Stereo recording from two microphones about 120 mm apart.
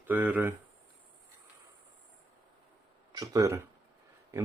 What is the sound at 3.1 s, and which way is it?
Speech, 30° right (ahead or behind).